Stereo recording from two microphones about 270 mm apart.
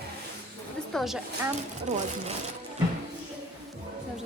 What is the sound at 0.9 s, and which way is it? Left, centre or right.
Speech, centre.